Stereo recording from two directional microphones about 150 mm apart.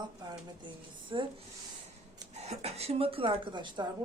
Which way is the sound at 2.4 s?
45° right (ahead or behind).